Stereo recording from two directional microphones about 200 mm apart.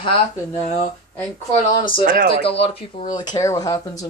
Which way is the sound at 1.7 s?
25° left (ahead or behind).